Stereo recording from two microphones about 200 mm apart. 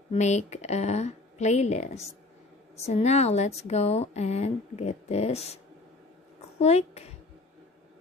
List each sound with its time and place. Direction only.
0.1 s speech: 35° left (ahead or behind)
6.6 s speech: 30° left (ahead or behind)